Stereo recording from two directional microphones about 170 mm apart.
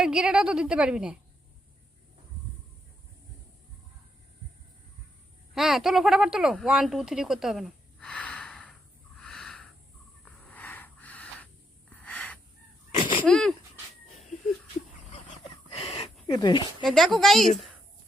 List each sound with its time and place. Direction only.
0.0 s a woman's voice: 5° right (ahead or behind)
5.5 s speech: centre (ahead or behind)
9.1 s a sound: 5° left (ahead or behind)
11.9 s gasp: 10° left (ahead or behind)
12.9 s a sound: 30° left (ahead or behind)
13.2 s a woman's voice: 5° left (ahead or behind)
15.7 s a sound: 35° left (ahead or behind)
16.2 s speech: 25° left (ahead or behind)
16.8 s a woman's voice: centre (ahead or behind)